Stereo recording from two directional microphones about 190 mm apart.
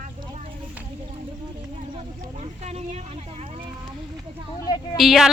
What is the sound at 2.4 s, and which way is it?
Speech, 35° right (ahead or behind).